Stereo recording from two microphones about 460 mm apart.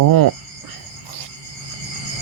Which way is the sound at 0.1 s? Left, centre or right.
Right.